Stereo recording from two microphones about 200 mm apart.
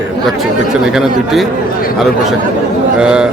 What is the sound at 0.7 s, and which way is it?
Speech, 5° right (ahead or behind).